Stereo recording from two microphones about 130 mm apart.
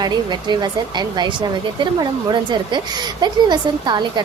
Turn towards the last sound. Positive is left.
turn(degrees=-35)  # may be behind; listen again after turning